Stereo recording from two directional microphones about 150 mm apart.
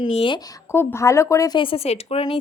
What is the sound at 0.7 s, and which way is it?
Speech, 20° left (ahead or behind).